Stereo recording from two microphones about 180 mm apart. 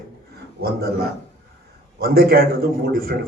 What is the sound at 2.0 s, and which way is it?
Speech, 55° right (ahead or behind).